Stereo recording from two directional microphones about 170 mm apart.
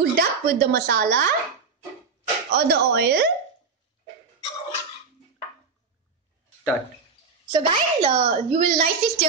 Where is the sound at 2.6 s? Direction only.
80° right.